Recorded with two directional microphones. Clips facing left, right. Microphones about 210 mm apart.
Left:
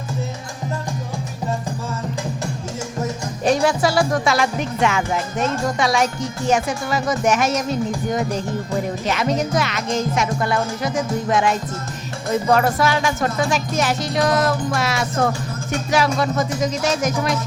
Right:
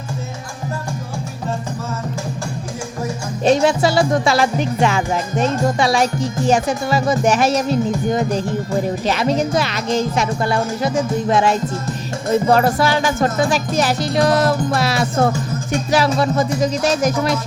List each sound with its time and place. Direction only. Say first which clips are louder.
3.4 s music: right 3 dB; 25° right (ahead or behind)